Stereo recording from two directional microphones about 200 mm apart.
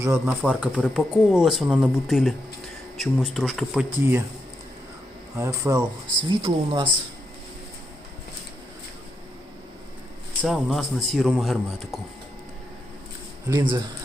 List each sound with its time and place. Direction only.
0.0 s speech: 10° right (ahead or behind)
5.4 s speech: 15° right (ahead or behind)
10.4 s speech: centre (ahead or behind)
13.5 s speech: 15° right (ahead or behind)